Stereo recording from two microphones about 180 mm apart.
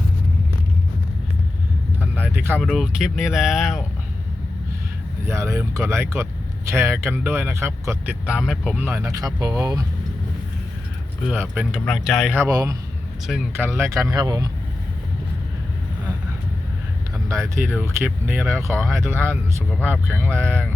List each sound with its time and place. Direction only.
2.0 s vehicle: 10° right (ahead or behind)
2.6 s speech: centre (ahead or behind)
5.2 s speech: 15° right (ahead or behind)
11.3 s speech: 10° right (ahead or behind)
12.4 s speech: 20° right (ahead or behind)
13.2 s speech: centre (ahead or behind)
13.7 s speech: 15° right (ahead or behind)
17.2 s speech: 15° right (ahead or behind)
18.8 s speech: 5° left (ahead or behind)
19.1 s speech: 15° right (ahead or behind)